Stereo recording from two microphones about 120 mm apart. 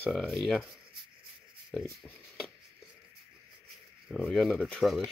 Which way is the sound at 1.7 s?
5° left (ahead or behind).